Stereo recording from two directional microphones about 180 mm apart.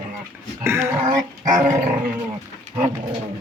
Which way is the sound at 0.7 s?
15° right (ahead or behind).